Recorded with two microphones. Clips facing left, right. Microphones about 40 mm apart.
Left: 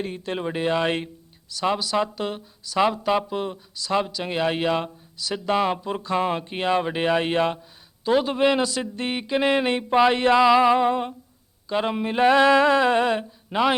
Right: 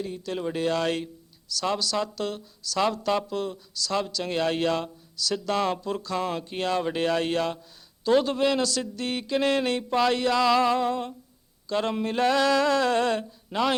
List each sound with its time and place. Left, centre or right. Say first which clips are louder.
0.0 s a man's voice: left 2 dB; left